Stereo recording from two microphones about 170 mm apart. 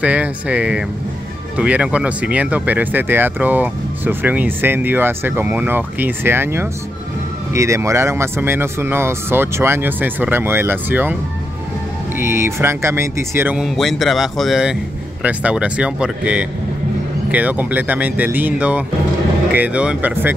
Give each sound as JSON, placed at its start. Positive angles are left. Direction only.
{"t": 0.0, "sound": "speech", "side_deg": -10}
{"t": 12.2, "sound": "speech", "side_deg": -15}
{"t": 13.6, "sound": "speech", "side_deg": 0}